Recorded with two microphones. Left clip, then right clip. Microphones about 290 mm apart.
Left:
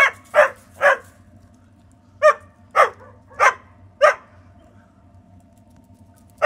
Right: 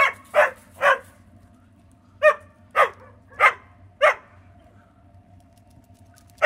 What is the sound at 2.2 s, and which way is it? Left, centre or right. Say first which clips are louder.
Dog: left 3 dB; centre.